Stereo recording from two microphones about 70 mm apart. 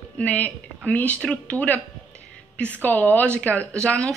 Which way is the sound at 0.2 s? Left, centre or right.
Left.